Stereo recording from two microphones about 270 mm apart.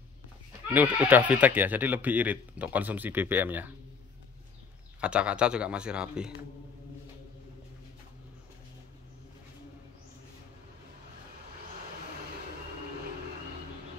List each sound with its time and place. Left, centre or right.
0.7 s speech: centre
5.0 s a man's voice: centre